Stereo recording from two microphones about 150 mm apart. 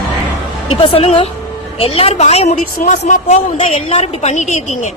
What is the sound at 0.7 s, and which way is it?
A woman's voice, 35° left (ahead or behind).